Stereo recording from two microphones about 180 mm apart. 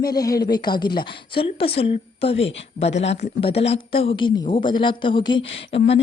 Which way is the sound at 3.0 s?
35° left (ahead or behind).